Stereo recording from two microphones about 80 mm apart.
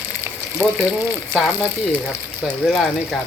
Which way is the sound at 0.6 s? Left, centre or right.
Centre.